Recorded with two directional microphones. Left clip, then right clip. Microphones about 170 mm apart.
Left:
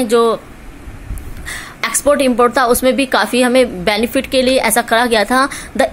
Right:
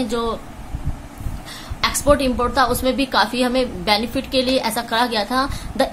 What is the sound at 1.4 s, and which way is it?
Speech, 45° left (ahead or behind).